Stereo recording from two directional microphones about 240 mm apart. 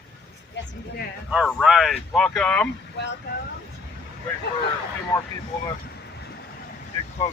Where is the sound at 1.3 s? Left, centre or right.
Centre.